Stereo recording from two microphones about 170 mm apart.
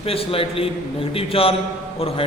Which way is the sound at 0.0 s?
35° left (ahead or behind).